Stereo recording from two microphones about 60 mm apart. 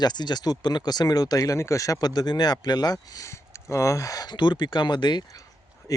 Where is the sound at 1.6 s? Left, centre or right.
Left.